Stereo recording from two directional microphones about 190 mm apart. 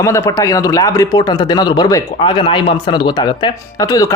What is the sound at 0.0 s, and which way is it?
Speech, 15° left (ahead or behind).